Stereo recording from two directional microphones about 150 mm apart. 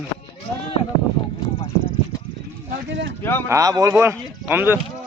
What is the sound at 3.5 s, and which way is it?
Speech, 25° right (ahead or behind).